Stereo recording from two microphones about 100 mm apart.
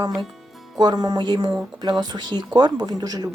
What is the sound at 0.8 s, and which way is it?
Speech, 40° right (ahead or behind).